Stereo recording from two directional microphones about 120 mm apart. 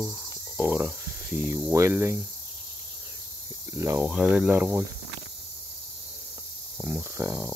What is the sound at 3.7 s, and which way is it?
Speech, 25° right (ahead or behind).